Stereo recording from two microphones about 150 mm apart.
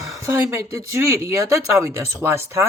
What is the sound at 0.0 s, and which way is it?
Speech, 20° right (ahead or behind).